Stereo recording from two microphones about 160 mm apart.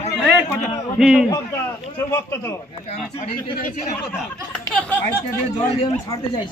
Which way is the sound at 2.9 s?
40° left (ahead or behind).